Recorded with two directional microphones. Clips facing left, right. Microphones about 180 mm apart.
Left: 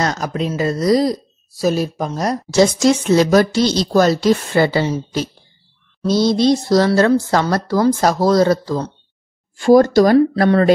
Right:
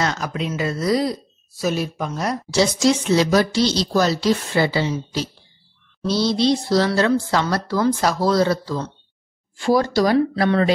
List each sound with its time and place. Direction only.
0.0 s a woman's voice: 40° left (ahead or behind)